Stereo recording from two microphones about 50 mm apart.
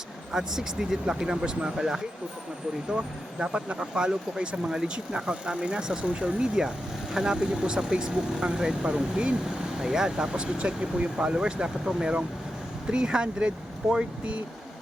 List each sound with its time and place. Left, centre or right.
0.3 s speech: centre